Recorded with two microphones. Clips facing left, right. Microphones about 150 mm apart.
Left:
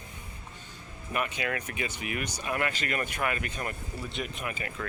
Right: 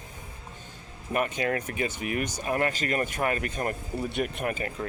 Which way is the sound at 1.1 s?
45° right (ahead or behind).